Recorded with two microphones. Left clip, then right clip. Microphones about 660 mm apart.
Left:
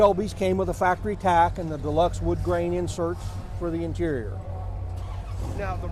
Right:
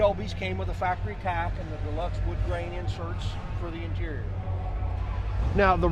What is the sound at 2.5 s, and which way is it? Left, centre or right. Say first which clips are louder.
Speech: left 6 dB; left.